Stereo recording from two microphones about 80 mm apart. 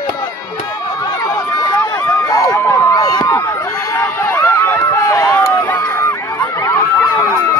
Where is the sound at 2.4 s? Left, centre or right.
Left.